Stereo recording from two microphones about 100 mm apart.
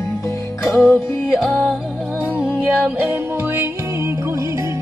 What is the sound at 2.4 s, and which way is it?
Music, 10° right (ahead or behind).